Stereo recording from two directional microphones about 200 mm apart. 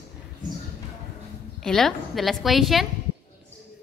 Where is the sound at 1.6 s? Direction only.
Centre (ahead or behind).